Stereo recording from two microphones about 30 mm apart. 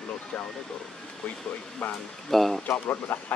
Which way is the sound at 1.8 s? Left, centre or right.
Left.